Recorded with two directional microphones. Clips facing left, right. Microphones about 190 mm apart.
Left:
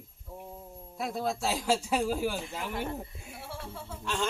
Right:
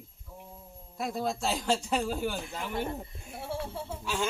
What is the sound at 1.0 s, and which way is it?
Speech, centre (ahead or behind).